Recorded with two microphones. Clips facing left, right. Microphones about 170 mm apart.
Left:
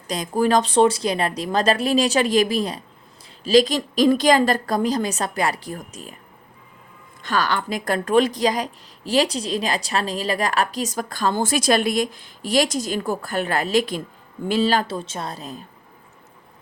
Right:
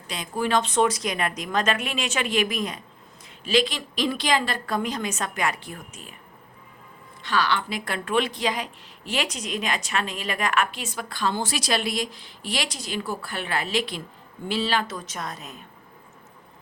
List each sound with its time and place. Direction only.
0.1 s a woman's voice: 40° left (ahead or behind)
7.2 s speech: 45° left (ahead or behind)
14.9 s a woman's voice: 30° left (ahead or behind)